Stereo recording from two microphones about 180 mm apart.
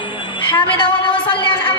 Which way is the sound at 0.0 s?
25° left (ahead or behind).